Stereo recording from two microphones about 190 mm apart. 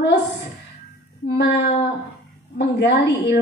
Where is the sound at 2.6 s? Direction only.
60° left (ahead or behind).